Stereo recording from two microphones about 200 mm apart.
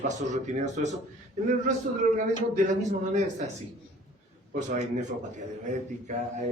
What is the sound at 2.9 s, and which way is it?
Speech, 35° right (ahead or behind).